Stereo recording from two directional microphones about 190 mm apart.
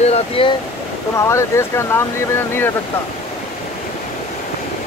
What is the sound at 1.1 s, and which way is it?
Speech, 15° left (ahead or behind).